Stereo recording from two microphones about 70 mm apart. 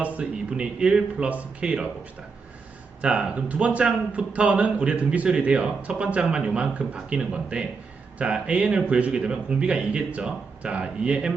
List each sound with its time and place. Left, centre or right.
0.0 s a man's voice: centre
3.0 s a man's voice: centre